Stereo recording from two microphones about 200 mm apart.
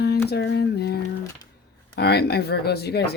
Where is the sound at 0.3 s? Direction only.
55° left (ahead or behind).